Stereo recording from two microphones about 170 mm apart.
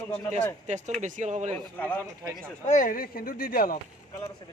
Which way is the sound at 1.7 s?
10° left (ahead or behind).